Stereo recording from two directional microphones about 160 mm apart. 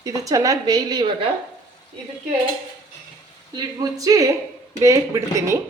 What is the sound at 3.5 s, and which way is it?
Speech, 25° right (ahead or behind).